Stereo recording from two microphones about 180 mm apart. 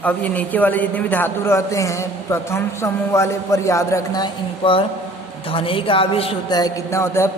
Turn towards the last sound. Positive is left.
turn(degrees=15)  # may be behind; listen again after turning